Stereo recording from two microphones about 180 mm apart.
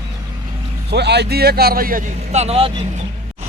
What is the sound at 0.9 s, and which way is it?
A man's voice, 70° right (ahead or behind).